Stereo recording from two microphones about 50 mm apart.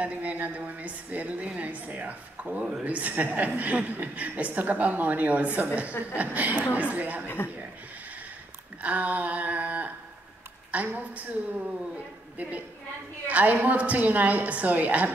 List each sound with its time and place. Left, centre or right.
0.0 s a woman's voice: right
7.2 s speech: left
8.8 s a woman's voice: right